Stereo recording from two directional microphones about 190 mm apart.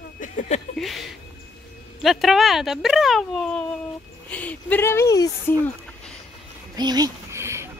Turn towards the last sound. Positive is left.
turn(degrees=-15)  # may be behind; listen again after turning